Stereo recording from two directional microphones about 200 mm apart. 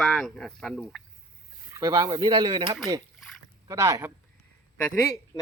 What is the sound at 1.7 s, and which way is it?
Speech, 15° right (ahead or behind).